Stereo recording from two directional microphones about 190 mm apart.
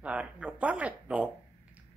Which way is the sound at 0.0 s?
5° right (ahead or behind).